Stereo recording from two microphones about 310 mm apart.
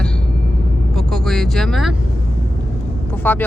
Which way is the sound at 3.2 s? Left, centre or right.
Centre.